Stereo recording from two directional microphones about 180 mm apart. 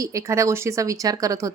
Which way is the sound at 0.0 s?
15° right (ahead or behind).